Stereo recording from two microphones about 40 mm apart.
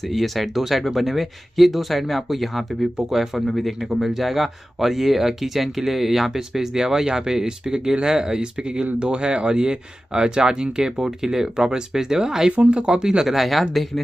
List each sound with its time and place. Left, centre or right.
0.0 s speech: centre